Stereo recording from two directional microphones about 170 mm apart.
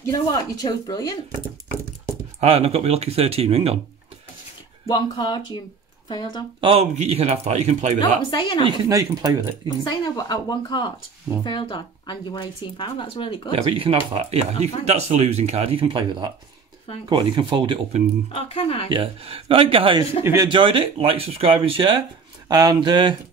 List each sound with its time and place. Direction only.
0.0 s a woman's voice: 20° left (ahead or behind)
2.4 s speech: 35° right (ahead or behind)
4.8 s a woman's voice: 25° left (ahead or behind)
6.6 s speech: 35° right (ahead or behind)
8.0 s a woman's voice: 25° left (ahead or behind)
8.6 s speech: 25° right (ahead or behind)
9.7 s a woman's voice: 25° left (ahead or behind)
13.5 s speech: 35° right (ahead or behind)
18.3 s speech: 35° left (ahead or behind)
18.9 s speech: 30° right (ahead or behind)